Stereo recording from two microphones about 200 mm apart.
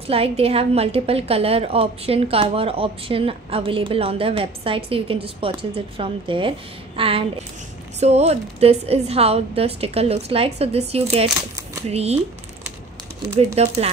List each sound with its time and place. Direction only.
0.1 s a woman's voice: 30° right (ahead or behind)
13.6 s a woman's voice: 30° right (ahead or behind)